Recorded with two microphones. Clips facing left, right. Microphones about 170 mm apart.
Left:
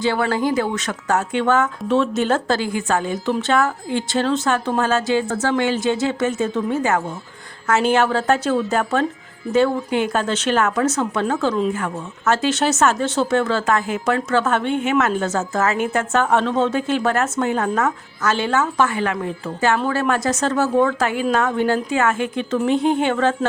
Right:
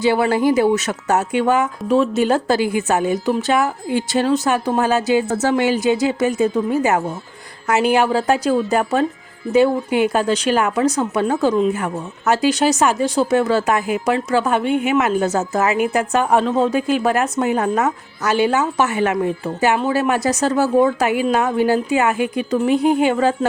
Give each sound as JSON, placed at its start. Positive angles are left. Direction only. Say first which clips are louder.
{"t": 0.0, "sound": "a woman's voice", "louder": "right 4 dB", "side_deg": -15}